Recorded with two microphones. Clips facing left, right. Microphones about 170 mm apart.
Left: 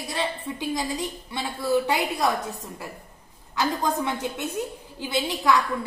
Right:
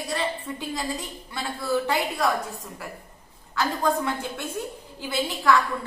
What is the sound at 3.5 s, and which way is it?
A man's voice, 20° left (ahead or behind).